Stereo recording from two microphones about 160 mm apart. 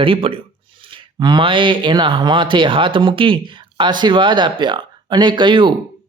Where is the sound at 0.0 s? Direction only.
35° right (ahead or behind).